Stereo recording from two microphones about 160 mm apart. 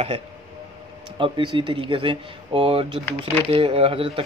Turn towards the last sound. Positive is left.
turn(degrees=-35)  # may be behind; listen again after turning